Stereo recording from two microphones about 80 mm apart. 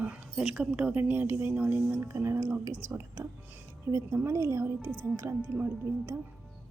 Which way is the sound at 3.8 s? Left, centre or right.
Right.